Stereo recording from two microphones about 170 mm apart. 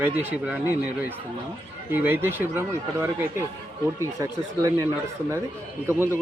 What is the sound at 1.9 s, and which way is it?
Speech, 10° right (ahead or behind).